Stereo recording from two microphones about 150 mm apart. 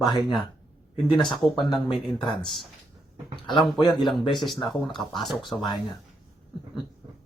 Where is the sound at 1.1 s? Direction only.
Centre (ahead or behind).